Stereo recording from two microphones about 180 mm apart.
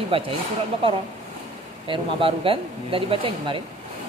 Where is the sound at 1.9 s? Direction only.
30° right (ahead or behind).